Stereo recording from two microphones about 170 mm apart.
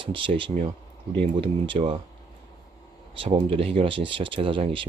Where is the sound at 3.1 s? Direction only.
30° right (ahead or behind).